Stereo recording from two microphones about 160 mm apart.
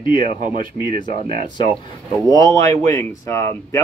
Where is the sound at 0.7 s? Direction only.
30° left (ahead or behind).